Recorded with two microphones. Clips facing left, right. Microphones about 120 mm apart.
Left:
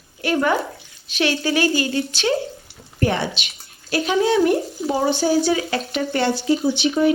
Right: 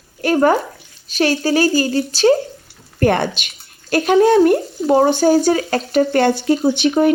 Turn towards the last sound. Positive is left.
turn(degrees=-50)  # may be behind; listen again after turning